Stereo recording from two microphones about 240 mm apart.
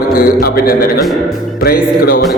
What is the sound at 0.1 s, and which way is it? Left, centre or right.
A man's voice, left.